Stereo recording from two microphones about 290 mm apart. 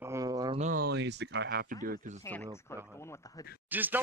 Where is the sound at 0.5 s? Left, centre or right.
Right.